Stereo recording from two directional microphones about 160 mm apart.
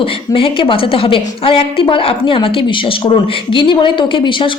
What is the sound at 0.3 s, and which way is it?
A woman's voice, 35° left (ahead or behind).